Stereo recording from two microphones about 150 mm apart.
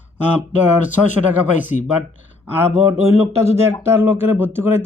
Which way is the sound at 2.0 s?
10° right (ahead or behind).